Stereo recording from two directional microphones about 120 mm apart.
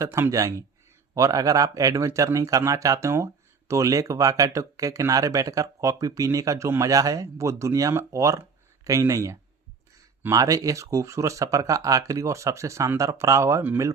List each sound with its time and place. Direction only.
0.0 s speech: 25° right (ahead or behind)